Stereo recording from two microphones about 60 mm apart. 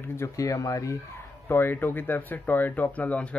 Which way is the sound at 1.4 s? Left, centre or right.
Left.